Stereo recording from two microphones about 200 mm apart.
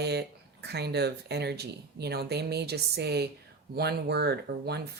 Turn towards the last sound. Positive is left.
turn(degrees=-55)  # may be behind; listen again after turning